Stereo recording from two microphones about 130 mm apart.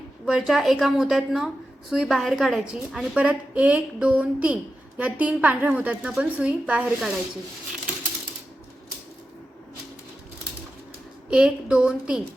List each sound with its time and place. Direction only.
0.3 s a woman's voice: 5° right (ahead or behind)
11.3 s a woman's voice: 5° right (ahead or behind)